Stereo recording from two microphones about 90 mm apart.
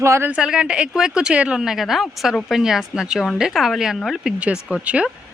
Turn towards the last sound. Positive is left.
turn(degrees=-15)  # may be behind; listen again after turning